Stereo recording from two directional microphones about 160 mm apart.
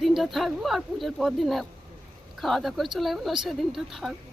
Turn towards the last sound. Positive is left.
turn(degrees=0)  # may be behind; listen again after turning